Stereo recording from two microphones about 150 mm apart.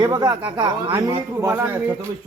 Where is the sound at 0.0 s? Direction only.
30° right (ahead or behind).